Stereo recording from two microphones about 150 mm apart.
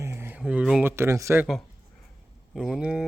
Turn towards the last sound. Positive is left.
turn(degrees=-5)  # may be behind; listen again after turning